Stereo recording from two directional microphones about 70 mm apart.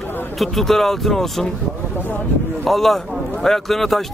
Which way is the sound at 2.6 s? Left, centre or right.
Centre.